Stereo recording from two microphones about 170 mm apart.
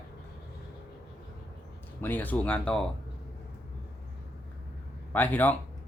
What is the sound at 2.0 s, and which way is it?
Speech, 10° left (ahead or behind).